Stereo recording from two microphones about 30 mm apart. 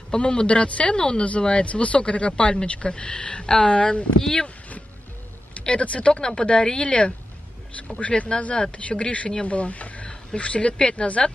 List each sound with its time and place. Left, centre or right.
0.1 s speech: left
4.2 s speech: left
5.6 s a sound: left
5.9 s speech: left
6.2 s speech: left